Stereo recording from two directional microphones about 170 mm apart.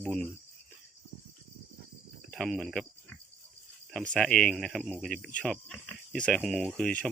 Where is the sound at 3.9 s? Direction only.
5° left (ahead or behind).